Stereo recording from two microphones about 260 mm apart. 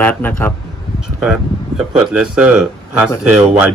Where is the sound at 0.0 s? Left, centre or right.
Centre.